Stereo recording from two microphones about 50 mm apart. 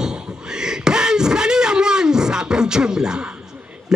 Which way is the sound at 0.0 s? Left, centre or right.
Centre.